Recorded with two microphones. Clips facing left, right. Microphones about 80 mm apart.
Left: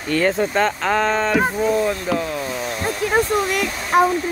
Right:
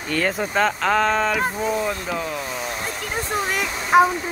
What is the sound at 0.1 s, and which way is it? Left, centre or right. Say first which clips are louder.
Speech: left 4 dB; centre.